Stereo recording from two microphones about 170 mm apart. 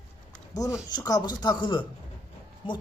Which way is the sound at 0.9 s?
25° left (ahead or behind).